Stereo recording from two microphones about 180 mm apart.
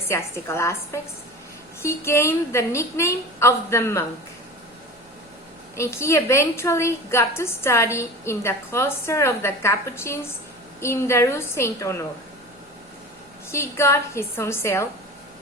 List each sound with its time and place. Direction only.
0.1 s a woman's voice: 15° left (ahead or behind)
5.7 s a woman's voice: 15° left (ahead or behind)
13.5 s a woman's voice: 15° left (ahead or behind)